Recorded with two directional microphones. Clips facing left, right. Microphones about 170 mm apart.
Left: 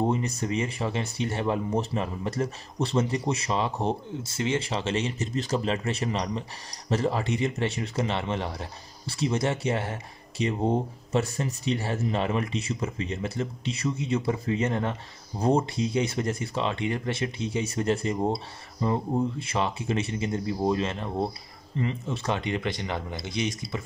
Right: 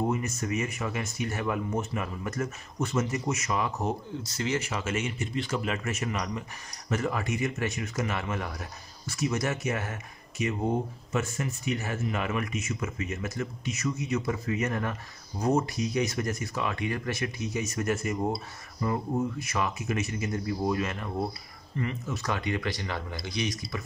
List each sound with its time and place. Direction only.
0.0 s speech: 30° left (ahead or behind)